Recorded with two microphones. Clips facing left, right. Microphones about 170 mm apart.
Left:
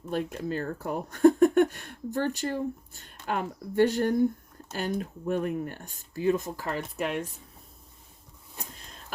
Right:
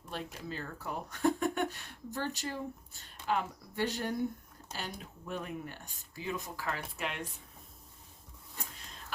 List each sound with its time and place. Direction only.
0.3 s speech: 55° left (ahead or behind)